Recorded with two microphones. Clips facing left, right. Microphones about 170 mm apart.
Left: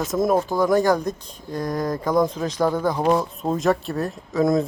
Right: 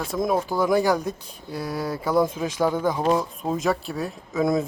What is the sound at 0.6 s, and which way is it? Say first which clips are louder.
Speech: left 1 dB; 10° right (ahead or behind).